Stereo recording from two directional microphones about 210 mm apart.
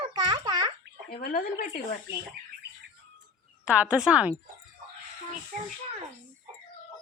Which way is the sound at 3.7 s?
5° right (ahead or behind).